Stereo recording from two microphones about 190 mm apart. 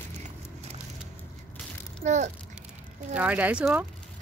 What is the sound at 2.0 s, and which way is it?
Speech, 40° right (ahead or behind).